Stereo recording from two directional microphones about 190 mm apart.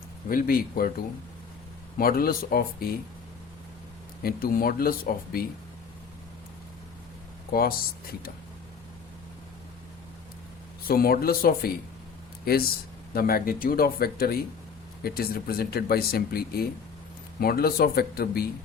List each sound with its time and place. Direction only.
0.3 s speech: 50° left (ahead or behind)
4.2 s speech: 50° left (ahead or behind)
10.8 s speech: 50° left (ahead or behind)
13.1 s speech: 50° left (ahead or behind)